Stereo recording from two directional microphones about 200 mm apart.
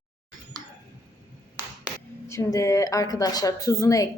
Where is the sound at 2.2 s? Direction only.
15° left (ahead or behind).